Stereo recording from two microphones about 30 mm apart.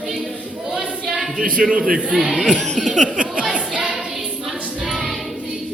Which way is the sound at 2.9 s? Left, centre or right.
Right.